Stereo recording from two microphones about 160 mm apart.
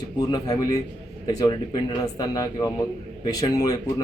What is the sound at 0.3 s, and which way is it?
A man's voice, 25° left (ahead or behind).